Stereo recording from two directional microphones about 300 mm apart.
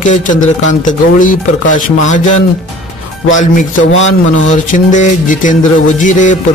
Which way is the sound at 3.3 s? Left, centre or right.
Left.